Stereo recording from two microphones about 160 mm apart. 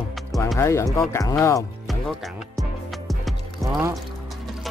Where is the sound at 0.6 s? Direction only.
15° left (ahead or behind).